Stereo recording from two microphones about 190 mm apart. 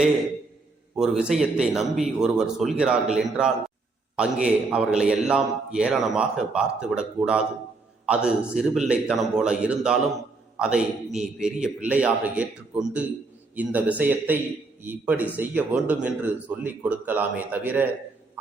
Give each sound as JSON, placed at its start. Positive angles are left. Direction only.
{"t": 0.9, "sound": "a man's voice", "side_deg": -5}
{"t": 8.0, "sound": "a man's voice", "side_deg": -5}